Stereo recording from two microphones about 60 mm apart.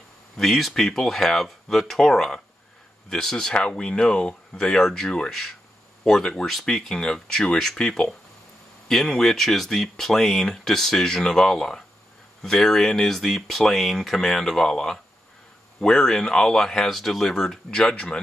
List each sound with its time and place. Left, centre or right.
0.4 s speech: centre
4.7 s speech: centre